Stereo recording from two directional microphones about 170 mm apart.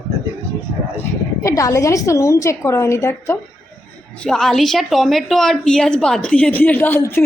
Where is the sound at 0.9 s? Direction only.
20° left (ahead or behind).